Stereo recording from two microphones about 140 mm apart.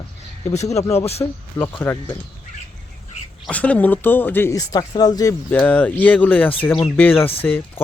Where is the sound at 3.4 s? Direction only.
10° left (ahead or behind).